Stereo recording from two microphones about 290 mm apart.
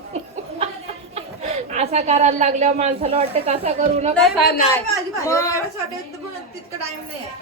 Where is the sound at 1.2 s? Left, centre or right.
Right.